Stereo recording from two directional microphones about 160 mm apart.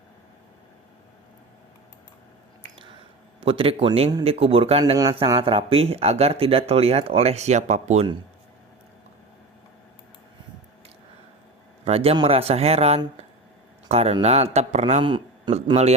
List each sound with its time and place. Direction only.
3.4 s speech: 35° right (ahead or behind)
11.9 s speech: 40° right (ahead or behind)
15.0 s speech: 30° right (ahead or behind)